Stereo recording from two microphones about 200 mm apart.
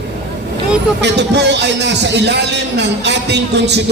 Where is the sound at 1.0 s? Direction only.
60° right (ahead or behind).